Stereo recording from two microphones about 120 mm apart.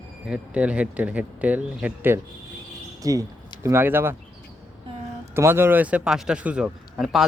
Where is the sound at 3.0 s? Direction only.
30° right (ahead or behind).